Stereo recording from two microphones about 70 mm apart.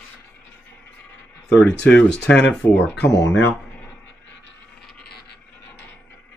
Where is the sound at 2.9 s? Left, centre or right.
Left.